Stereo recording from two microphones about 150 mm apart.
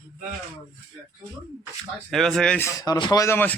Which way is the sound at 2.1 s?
Centre (ahead or behind).